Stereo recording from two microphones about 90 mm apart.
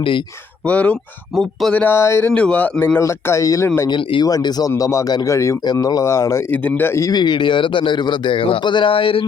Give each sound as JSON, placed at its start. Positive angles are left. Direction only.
{"t": 0.6, "sound": "speech", "side_deg": 15}
{"t": 2.0, "sound": "speech", "side_deg": 25}
{"t": 2.3, "sound": "speech", "side_deg": 15}
{"t": 3.0, "sound": "speech", "side_deg": 30}
{"t": 3.8, "sound": "a man's voice", "side_deg": 60}
{"t": 4.3, "sound": "speech", "side_deg": 45}
{"t": 5.6, "sound": "speech", "side_deg": 45}
{"t": 6.5, "sound": "speech", "side_deg": 20}
{"t": 7.0, "sound": "a man's voice", "side_deg": 50}